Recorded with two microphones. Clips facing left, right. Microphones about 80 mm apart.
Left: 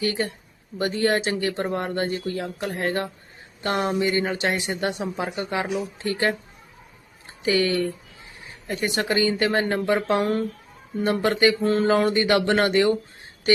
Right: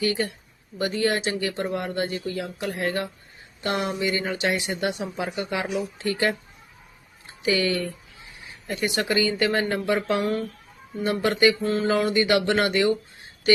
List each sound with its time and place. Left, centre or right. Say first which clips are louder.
0.0 s speech: even; left
7.4 s speech: left 2 dB; left